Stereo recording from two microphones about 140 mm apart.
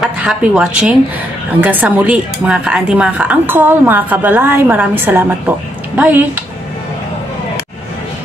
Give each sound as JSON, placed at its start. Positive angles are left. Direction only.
{"t": 0.0, "sound": "speech", "side_deg": -5}